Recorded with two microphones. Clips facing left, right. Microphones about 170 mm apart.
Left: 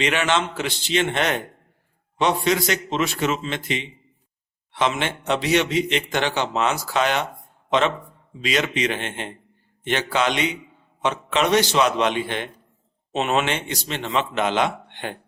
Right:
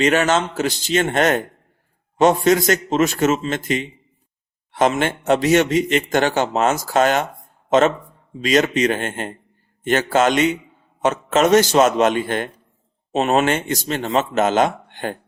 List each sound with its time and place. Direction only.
0.0 s a man's voice: 40° right (ahead or behind)